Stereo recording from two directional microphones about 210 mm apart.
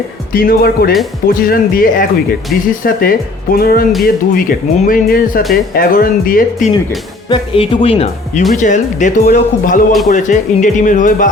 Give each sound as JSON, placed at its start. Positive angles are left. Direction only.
{"t": 0.3, "sound": "speech", "side_deg": 45}
{"t": 7.3, "sound": "speech", "side_deg": 25}